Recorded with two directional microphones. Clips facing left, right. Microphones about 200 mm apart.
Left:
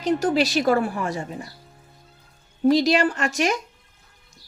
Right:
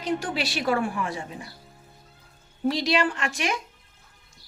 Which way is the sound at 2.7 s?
40° left (ahead or behind).